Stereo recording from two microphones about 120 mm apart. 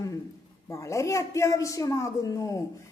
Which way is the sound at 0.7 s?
25° left (ahead or behind).